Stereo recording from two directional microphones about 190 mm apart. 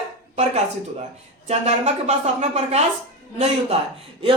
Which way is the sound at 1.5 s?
35° right (ahead or behind).